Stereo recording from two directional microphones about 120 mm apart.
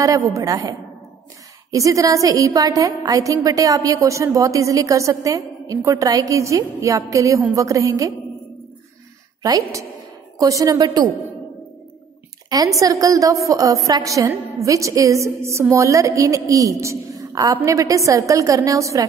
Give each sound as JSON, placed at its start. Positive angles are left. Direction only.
{"t": 0.0, "sound": "a woman's voice", "side_deg": -30}
{"t": 10.4, "sound": "a woman's voice", "side_deg": -30}
{"t": 12.4, "sound": "a woman's voice", "side_deg": -30}